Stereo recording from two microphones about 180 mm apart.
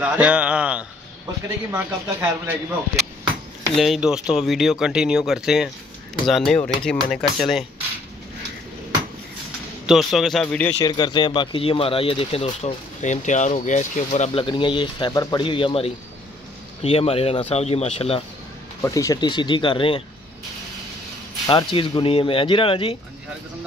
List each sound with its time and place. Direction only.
0.0 s speech: 5° right (ahead or behind)
3.7 s speech: centre (ahead or behind)
9.8 s speech: centre (ahead or behind)
10.8 s speech: 25° left (ahead or behind); by 14.4 s 40° left (ahead or behind)
14.4 s speech: 25° left (ahead or behind)
18.8 s speech: 15° left (ahead or behind)
21.5 s speech: 30° left (ahead or behind)